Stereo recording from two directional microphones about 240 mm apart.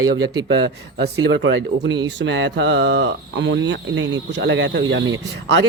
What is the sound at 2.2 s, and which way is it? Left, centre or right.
Speech, right.